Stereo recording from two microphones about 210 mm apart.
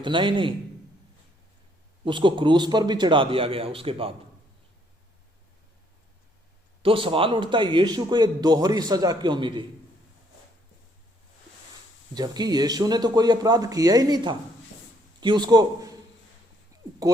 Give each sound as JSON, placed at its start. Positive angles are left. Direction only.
{"t": 0.0, "sound": "speech", "side_deg": -25}
{"t": 2.0, "sound": "speech", "side_deg": -25}
{"t": 6.8, "sound": "speech", "side_deg": -25}
{"t": 12.1, "sound": "a man's voice", "side_deg": -20}